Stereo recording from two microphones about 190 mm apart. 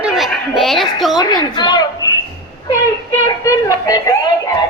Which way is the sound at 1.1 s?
20° left (ahead or behind).